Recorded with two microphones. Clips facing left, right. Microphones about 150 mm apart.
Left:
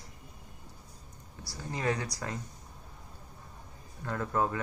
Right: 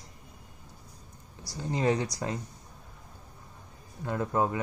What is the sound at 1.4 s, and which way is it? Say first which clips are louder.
Speech: right 5 dB; 20° right (ahead or behind).